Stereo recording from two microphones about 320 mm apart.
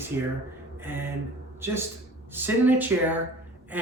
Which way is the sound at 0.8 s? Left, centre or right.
Centre.